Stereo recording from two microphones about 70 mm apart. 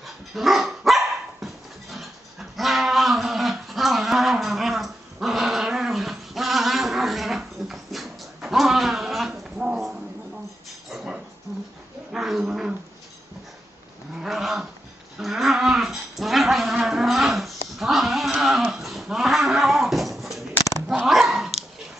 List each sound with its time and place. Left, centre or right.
0.0 s dog: centre
8.4 s a sound: centre
9.3 s a sound: centre
11.5 s dog: right
12.1 s dog: centre
14.2 s dog: centre
15.1 s livestock: centre
18.4 s a sound: centre
21.0 s dog: centre